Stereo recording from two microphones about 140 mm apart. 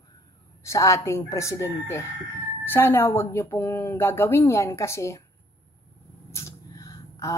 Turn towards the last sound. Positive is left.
turn(degrees=25)  # may be behind; listen again after turning